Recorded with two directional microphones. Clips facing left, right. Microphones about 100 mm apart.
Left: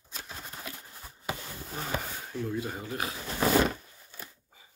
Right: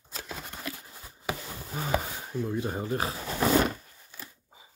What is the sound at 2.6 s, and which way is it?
Speech, 30° right (ahead or behind).